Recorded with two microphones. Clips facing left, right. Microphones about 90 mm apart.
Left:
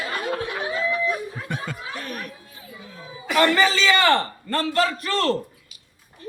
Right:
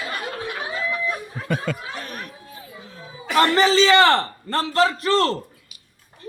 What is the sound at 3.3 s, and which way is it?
A man's voice, 30° right (ahead or behind).